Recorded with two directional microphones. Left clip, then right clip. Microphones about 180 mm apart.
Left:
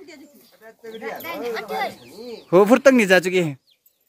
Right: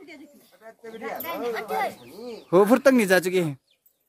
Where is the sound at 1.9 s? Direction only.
5° left (ahead or behind).